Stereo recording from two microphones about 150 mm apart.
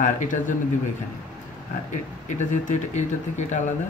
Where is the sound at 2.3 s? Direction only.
55° left (ahead or behind).